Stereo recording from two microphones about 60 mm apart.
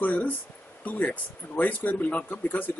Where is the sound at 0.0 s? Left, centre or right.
Left.